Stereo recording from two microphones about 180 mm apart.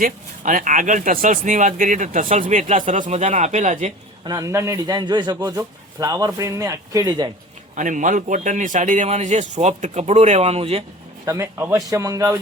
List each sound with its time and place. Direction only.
0.0 s speech: 45° right (ahead or behind)
4.3 s speech: 20° right (ahead or behind)
7.8 s a man's voice: 45° right (ahead or behind)
11.3 s a man's voice: 15° right (ahead or behind)